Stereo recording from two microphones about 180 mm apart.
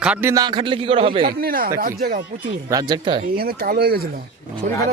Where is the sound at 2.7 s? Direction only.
25° right (ahead or behind).